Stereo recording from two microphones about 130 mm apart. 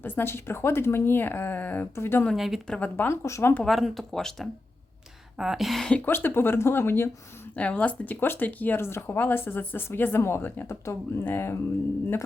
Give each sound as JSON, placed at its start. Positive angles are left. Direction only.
{"t": 0.0, "sound": "speech", "side_deg": 15}
{"t": 2.3, "sound": "speech", "side_deg": 0}
{"t": 2.7, "sound": "speech", "side_deg": 15}
{"t": 3.6, "sound": "speech", "side_deg": 0}
{"t": 6.1, "sound": "speech", "side_deg": 15}